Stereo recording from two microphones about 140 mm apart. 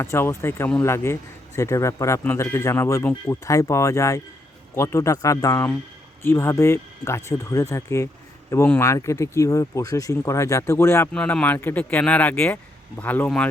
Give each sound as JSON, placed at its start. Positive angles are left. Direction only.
{"t": 0.0, "sound": "speech", "side_deg": 20}
{"t": 11.1, "sound": "speech", "side_deg": 5}